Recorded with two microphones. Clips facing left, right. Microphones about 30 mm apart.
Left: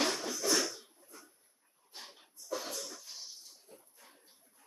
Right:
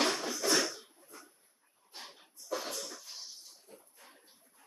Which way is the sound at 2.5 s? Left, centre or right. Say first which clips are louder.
Right 1 dB; right.